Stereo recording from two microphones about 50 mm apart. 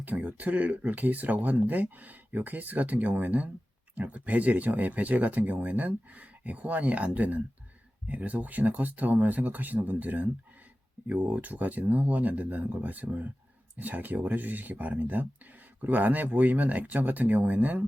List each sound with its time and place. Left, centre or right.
0.0 s speech: right